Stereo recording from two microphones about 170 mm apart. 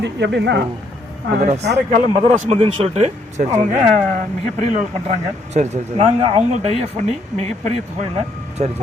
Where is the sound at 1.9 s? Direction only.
50° right (ahead or behind).